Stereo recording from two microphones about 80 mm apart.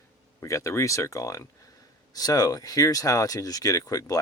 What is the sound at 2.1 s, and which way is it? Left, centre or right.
Speech, left.